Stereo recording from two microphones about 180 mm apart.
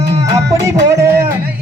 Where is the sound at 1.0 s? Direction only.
15° right (ahead or behind).